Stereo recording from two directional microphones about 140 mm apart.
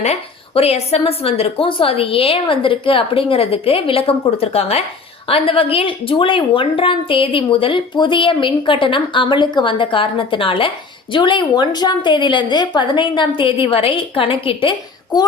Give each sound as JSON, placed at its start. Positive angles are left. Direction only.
{"t": 0.0, "sound": "a woman's voice", "side_deg": 50}